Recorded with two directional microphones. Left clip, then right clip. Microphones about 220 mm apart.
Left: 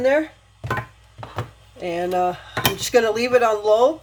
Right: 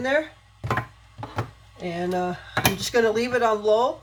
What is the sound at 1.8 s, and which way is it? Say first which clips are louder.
Speech: left 6 dB; 30° left (ahead or behind).